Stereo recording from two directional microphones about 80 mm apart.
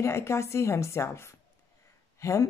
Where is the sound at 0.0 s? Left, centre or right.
Left.